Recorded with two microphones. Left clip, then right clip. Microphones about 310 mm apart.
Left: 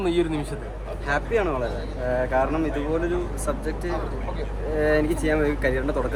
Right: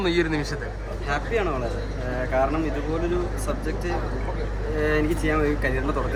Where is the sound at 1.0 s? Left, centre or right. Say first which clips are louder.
Left 2 dB; left.